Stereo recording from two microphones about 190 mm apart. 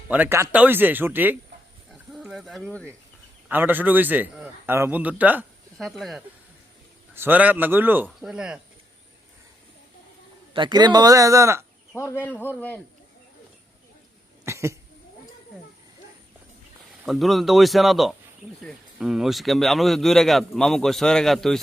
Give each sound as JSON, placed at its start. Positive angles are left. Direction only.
{"t": 0.1, "sound": "a man's voice", "side_deg": -10}
{"t": 1.9, "sound": "a sound", "side_deg": 0}
{"t": 3.5, "sound": "a man's voice", "side_deg": -10}
{"t": 7.1, "sound": "a man's voice", "side_deg": -10}
{"t": 10.5, "sound": "speech", "side_deg": -25}
{"t": 11.9, "sound": "speech", "side_deg": 15}
{"t": 14.4, "sound": "cat", "side_deg": -15}
{"t": 17.1, "sound": "speech", "side_deg": 0}